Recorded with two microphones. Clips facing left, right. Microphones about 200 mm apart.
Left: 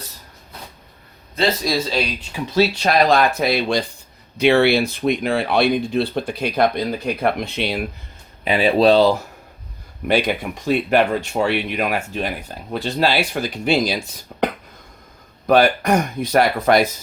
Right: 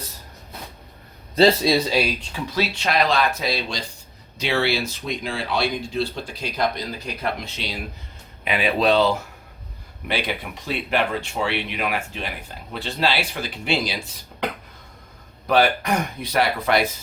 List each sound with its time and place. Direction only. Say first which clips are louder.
1.7 s speech: right 1 dB; 10° right (ahead or behind)
2.6 s speech: left 6 dB; 40° left (ahead or behind); by 7.8 s 60° left (ahead or behind)
8.4 s speech: left 6 dB; 30° left (ahead or behind)
10.1 s speech: left 8 dB; 45° left (ahead or behind)
15.4 s speech: left 4 dB; 45° left (ahead or behind)